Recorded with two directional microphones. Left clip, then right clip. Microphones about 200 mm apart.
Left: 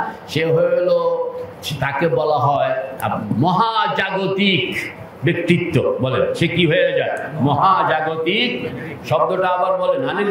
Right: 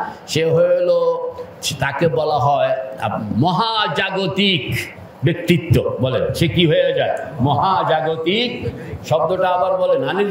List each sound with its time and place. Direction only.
0.3 s a man's voice: 50° right (ahead or behind)